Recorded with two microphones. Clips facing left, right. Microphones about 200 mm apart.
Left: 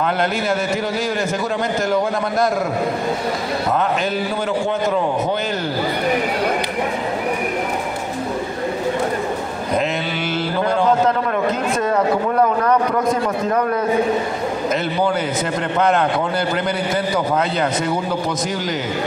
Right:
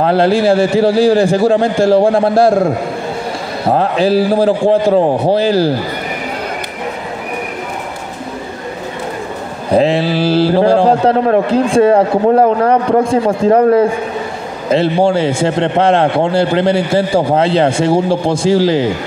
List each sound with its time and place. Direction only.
0.0 s mantra: 30° right (ahead or behind)
9.7 s mantra: 30° right (ahead or behind)
14.7 s a man's voice: 30° right (ahead or behind)